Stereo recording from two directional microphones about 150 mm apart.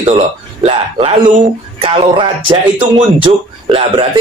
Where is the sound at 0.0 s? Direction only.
45° right (ahead or behind).